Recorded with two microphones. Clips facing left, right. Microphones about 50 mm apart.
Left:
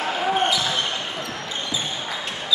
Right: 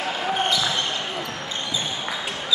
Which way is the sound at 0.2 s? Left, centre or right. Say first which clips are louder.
Left 3 dB; centre.